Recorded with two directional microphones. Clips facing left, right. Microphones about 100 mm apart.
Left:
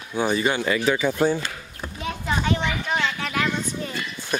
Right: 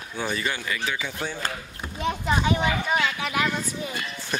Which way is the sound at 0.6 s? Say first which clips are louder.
Left 8 dB; 40° left (ahead or behind).